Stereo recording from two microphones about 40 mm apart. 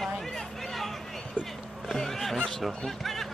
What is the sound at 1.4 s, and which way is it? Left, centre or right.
Speech, left.